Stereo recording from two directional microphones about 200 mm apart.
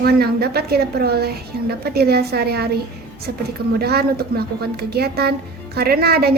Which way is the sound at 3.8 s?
50° right (ahead or behind).